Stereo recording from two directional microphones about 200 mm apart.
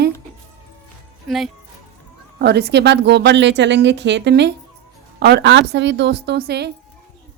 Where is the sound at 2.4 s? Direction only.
55° right (ahead or behind).